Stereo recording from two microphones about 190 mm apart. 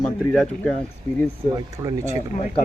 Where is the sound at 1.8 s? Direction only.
15° right (ahead or behind).